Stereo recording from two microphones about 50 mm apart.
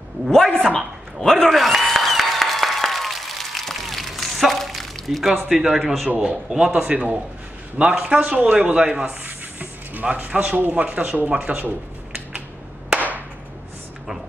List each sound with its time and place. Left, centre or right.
0.3 s a man's voice: centre
1.5 s applause: centre
5.5 s speech: centre
6.0 s speech: right
6.5 s speech: centre
9.2 s a sound: right
10.0 s speech: right